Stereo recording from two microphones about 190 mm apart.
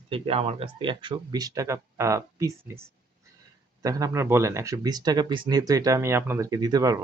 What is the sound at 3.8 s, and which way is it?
Speech, 20° right (ahead or behind).